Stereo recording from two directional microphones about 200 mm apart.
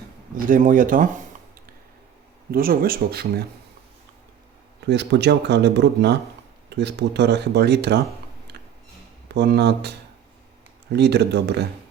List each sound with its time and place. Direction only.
0.3 s speech: 40° right (ahead or behind)
2.5 s speech: 50° right (ahead or behind)
4.9 s speech: 60° right (ahead or behind)
9.3 s speech: 55° right (ahead or behind)
10.9 s speech: 55° right (ahead or behind)